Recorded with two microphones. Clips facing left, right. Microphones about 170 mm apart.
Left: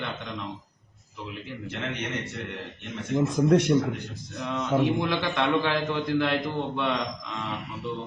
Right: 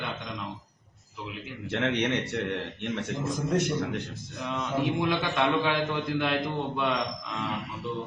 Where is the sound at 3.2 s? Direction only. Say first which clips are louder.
Left 8 dB; 80° left.